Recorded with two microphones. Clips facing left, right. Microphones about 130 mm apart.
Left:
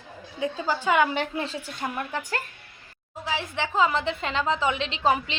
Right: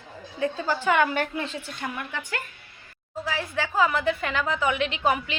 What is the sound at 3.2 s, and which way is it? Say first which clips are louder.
A woman's voice: even; 20° left (ahead or behind).